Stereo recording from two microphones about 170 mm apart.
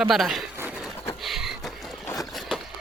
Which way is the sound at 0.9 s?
15° left (ahead or behind).